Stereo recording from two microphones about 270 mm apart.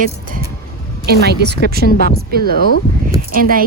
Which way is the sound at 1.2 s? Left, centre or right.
Right.